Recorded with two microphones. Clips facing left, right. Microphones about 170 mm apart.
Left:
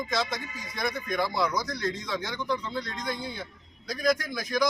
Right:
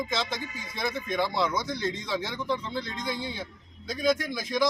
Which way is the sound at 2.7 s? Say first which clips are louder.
Even; centre (ahead or behind).